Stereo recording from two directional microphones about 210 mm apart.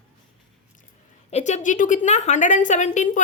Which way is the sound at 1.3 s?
35° left (ahead or behind).